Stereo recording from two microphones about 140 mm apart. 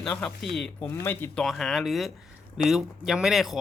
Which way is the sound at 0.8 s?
15° left (ahead or behind).